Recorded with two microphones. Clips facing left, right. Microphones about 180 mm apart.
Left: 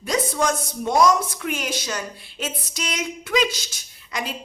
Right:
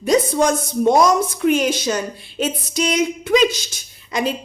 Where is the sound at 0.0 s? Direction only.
20° right (ahead or behind).